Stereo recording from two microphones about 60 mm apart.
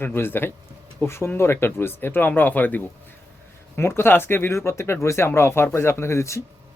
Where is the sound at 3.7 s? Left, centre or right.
Left.